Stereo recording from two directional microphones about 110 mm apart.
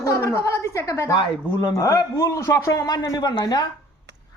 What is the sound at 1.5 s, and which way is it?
A man's voice, 35° left (ahead or behind).